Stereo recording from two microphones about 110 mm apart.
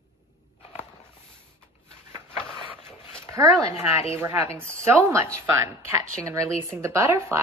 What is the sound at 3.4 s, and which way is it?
Speech, 25° right (ahead or behind).